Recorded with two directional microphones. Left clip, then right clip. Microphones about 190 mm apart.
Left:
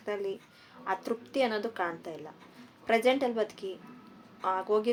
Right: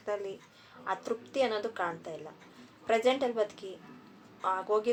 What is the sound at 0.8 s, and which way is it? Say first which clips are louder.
A woman's voice: left 1 dB; 40° left (ahead or behind).